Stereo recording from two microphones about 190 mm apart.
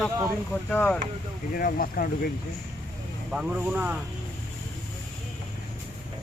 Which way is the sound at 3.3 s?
5° right (ahead or behind).